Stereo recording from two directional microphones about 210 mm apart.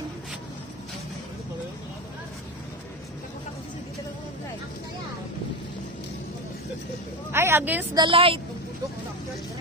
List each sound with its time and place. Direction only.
7.3 s a woman's voice: 10° right (ahead or behind)
8.0 s a woman's voice: 25° right (ahead or behind)